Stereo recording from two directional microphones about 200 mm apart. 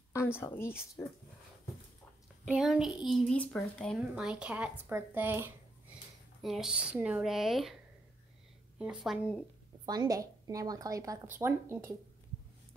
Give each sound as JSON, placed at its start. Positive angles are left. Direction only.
{"t": 0.1, "sound": "speech", "side_deg": 15}
{"t": 2.4, "sound": "a woman's voice", "side_deg": -5}
{"t": 9.8, "sound": "speech", "side_deg": -20}